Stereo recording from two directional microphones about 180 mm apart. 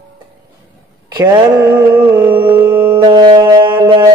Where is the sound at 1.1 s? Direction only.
25° right (ahead or behind).